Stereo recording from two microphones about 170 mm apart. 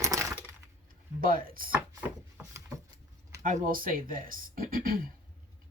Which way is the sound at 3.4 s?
50° right (ahead or behind).